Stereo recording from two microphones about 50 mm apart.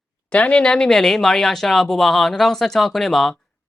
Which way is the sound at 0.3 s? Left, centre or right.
Left.